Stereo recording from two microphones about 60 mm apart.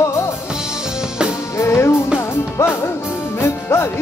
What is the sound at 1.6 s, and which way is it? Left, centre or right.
Music, left.